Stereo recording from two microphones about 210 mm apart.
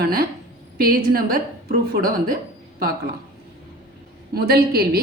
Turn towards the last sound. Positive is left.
turn(degrees=-45)  # may be behind; listen again after turning